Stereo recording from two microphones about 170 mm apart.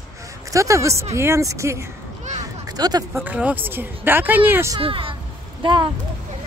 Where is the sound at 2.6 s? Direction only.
25° right (ahead or behind).